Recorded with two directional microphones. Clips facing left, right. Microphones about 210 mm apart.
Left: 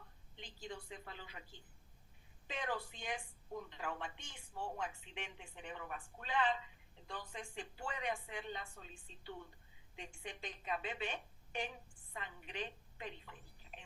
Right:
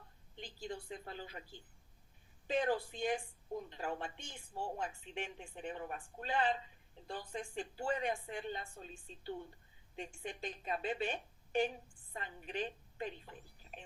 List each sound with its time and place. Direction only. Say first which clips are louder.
0.3 s speech: right 4 dB; 40° right (ahead or behind)
2.5 s a woman's voice: right 8 dB; 35° right (ahead or behind)